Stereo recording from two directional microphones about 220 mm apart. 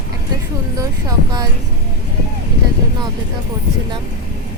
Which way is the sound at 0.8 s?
15° right (ahead or behind).